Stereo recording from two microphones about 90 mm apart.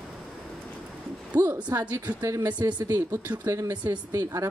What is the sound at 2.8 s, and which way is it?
Speech, 35° right (ahead or behind).